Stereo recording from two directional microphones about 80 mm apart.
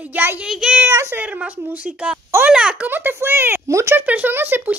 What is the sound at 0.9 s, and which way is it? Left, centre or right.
Speech, right.